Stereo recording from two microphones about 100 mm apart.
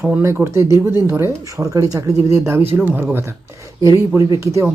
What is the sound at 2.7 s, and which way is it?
Speech, 15° right (ahead or behind).